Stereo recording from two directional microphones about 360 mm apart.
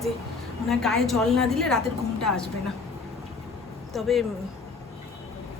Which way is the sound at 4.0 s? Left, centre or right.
Centre.